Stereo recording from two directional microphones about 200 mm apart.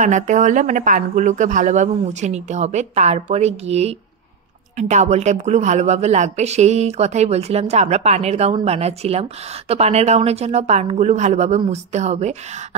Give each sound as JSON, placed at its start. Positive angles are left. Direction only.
{"t": 0.0, "sound": "a woman's voice", "side_deg": -35}